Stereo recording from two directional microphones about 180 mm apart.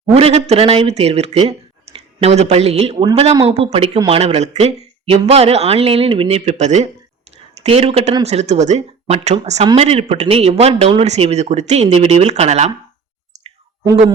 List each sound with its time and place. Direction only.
0.0 s speech: 35° right (ahead or behind)